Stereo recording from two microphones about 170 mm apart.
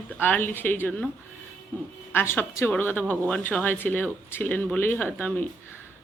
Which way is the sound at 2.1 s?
10° left (ahead or behind).